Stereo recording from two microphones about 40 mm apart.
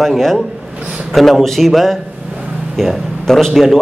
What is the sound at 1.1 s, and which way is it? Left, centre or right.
A man's voice, centre.